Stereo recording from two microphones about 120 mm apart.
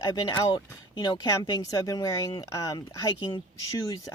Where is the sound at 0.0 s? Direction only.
35° left (ahead or behind).